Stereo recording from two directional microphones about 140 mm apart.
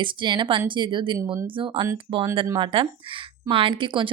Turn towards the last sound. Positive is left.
turn(degrees=-35)  # may be behind; listen again after turning